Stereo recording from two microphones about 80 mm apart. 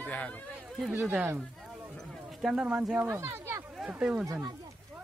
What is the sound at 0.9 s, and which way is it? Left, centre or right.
Speech, centre.